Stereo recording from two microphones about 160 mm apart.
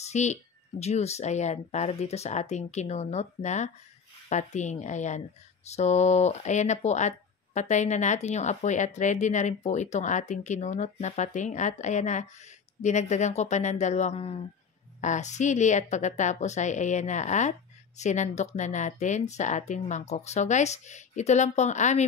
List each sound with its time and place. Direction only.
0.0 s speech: 45° left (ahead or behind)
15.0 s speech: 50° left (ahead or behind)